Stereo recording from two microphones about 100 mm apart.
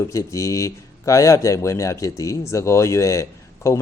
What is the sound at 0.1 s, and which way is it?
Speech, 30° left (ahead or behind).